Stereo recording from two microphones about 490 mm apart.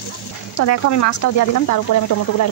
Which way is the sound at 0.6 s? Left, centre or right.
Left.